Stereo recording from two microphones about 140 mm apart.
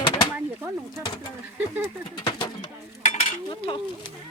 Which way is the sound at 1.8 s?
35° left (ahead or behind).